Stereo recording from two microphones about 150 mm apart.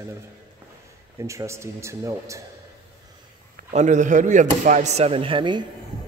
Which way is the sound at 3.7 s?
55° right (ahead or behind).